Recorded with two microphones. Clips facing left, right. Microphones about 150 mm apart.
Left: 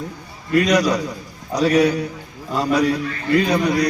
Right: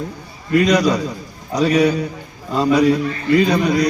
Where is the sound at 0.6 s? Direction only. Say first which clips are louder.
Right 2 dB; 25° right (ahead or behind).